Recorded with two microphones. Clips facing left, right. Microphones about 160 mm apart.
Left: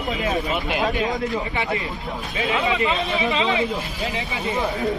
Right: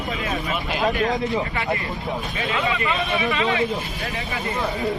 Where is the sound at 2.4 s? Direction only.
20° left (ahead or behind).